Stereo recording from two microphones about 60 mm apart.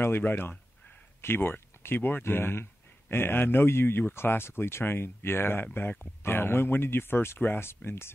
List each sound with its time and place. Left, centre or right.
0.0 s speech: left